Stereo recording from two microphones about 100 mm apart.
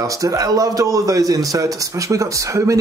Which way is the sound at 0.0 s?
35° right (ahead or behind).